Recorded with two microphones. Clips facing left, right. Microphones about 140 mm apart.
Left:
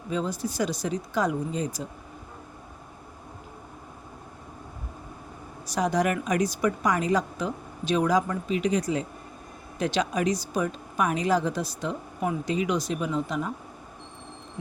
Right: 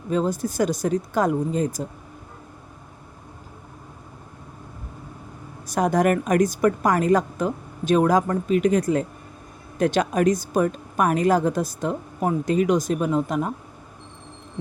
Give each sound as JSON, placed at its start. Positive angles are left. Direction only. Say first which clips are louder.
{"t": 0.1, "sound": "a woman's voice", "louder": "right 6 dB", "side_deg": -45}
{"t": 5.6, "sound": "a woman's voice", "louder": "right 5 dB", "side_deg": -50}